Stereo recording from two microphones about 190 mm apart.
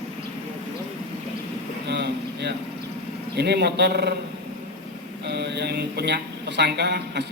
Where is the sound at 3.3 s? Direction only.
60° right (ahead or behind).